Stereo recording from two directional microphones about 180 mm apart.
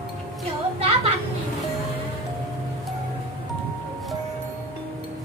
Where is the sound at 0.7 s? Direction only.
35° right (ahead or behind).